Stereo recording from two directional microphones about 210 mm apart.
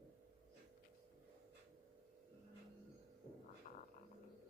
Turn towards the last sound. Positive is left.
turn(degrees=35)  # may be behind; listen again after turning